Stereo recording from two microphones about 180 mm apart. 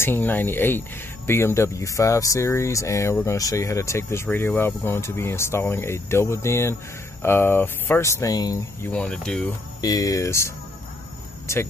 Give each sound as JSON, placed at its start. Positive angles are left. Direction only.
{"t": 0.0, "sound": "speech", "side_deg": 10}
{"t": 8.9, "sound": "speech", "side_deg": 5}
{"t": 9.8, "sound": "speech", "side_deg": 20}